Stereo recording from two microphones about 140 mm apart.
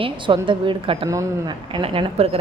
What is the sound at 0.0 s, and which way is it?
A woman's voice, 35° right (ahead or behind).